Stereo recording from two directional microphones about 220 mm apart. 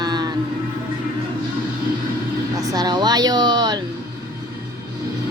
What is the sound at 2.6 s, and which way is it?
A woman's voice, 15° right (ahead or behind).